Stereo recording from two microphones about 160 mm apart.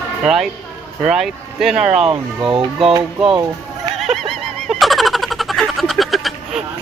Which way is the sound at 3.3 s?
25° right (ahead or behind).